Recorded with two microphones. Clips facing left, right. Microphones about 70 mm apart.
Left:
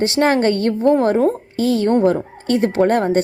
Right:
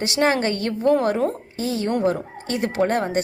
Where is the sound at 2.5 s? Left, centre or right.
Left.